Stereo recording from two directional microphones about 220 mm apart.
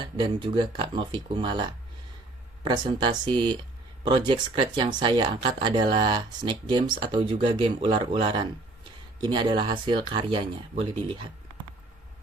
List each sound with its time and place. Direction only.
0.0 s speech: 20° right (ahead or behind)